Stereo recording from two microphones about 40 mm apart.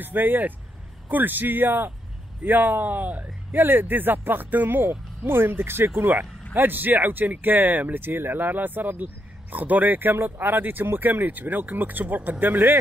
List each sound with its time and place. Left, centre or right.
0.0 s speech: right
3.5 s speech: right
5.9 s speech: right